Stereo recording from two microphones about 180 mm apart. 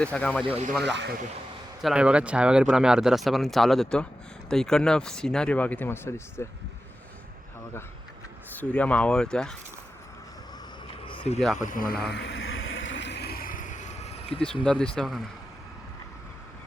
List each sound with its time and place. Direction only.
0.0 s speech: 5° left (ahead or behind)
0.4 s speech: 30° right (ahead or behind)
0.8 s speech: 75° right (ahead or behind)
1.8 s speech: 5° right (ahead or behind); by 6.2 s 15° left (ahead or behind)
8.5 s speech: 10° left (ahead or behind)
11.0 s a sound: 30° left (ahead or behind)
11.5 s a sound: 50° left (ahead or behind)
14.4 s speech: 5° left (ahead or behind)